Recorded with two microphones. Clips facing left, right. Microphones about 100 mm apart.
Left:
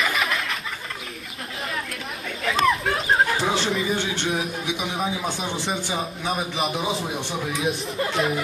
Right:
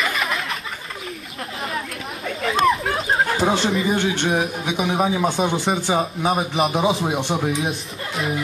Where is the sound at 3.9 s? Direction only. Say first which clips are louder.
Right 5 dB; 55° right (ahead or behind); by 6.3 s 40° right (ahead or behind).